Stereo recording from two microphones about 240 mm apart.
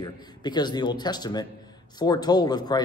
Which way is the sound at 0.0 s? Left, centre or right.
Centre.